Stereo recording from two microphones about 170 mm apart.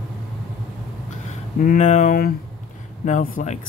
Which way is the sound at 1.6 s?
50° left (ahead or behind).